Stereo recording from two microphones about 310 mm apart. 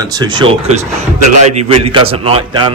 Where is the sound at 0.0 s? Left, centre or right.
Centre.